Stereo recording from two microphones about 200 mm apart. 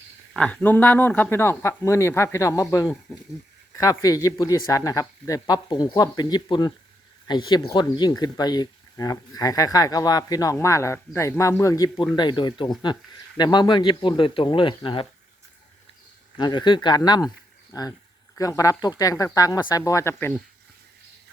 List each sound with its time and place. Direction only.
0.3 s speech: 5° left (ahead or behind); by 15.0 s 25° left (ahead or behind)
16.4 s speech: 20° left (ahead or behind)